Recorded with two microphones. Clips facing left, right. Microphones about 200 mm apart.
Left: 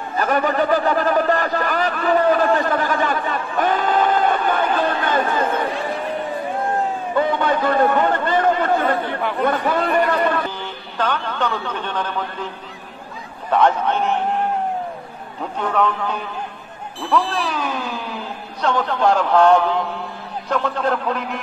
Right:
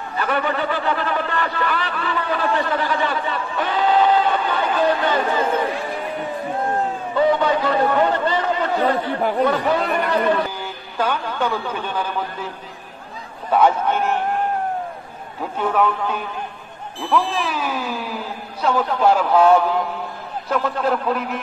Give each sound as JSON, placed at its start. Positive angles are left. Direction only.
{"t": 0.2, "sound": "a sound", "side_deg": 40}
{"t": 7.2, "sound": "chatter", "side_deg": 55}
{"t": 10.6, "sound": "a man's voice", "side_deg": -10}
{"t": 13.5, "sound": "a man's voice", "side_deg": -5}
{"t": 15.6, "sound": "a man's voice", "side_deg": -5}